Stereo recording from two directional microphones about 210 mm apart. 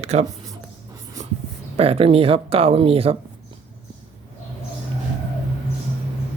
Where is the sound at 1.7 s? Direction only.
25° right (ahead or behind).